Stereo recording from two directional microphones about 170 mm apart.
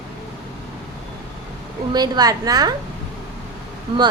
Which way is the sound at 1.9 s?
25° right (ahead or behind).